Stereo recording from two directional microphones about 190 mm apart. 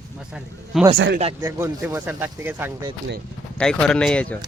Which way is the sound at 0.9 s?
70° right (ahead or behind).